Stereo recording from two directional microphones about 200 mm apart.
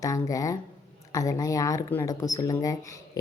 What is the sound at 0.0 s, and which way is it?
A woman's voice, 15° left (ahead or behind).